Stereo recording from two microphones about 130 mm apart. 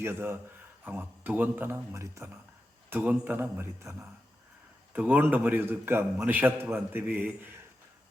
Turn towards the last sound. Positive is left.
turn(degrees=-15)  # may be behind; listen again after turning